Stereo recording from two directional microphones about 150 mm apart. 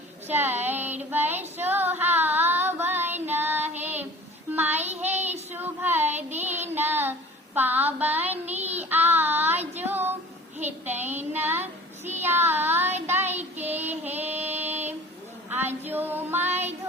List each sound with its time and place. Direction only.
0.3 s child singing: 15° right (ahead or behind)
1.1 s female singing: 10° right (ahead or behind)
3.2 s child singing: 15° right (ahead or behind)
9.8 s a sound: 15° right (ahead or behind)
10.6 s child singing: 10° right (ahead or behind)
11.3 s a sound: 15° right (ahead or behind)
12.2 s child singing: 15° right (ahead or behind)
15.5 s female singing: 15° right (ahead or behind)